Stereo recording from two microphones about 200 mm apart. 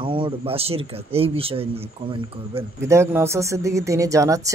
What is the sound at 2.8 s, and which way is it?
Speech, 15° right (ahead or behind).